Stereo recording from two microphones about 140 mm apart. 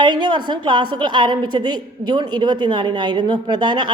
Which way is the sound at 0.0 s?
30° right (ahead or behind).